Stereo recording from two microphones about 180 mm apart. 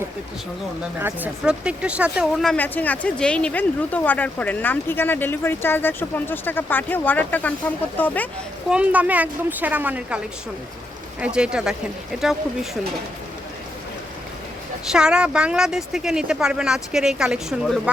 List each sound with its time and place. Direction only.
0.9 s speech: 10° right (ahead or behind); by 8.3 s 10° left (ahead or behind)
8.7 s a woman's voice: 10° right (ahead or behind)
11.2 s speech: 5° right (ahead or behind)
14.8 s speech: 5° right (ahead or behind)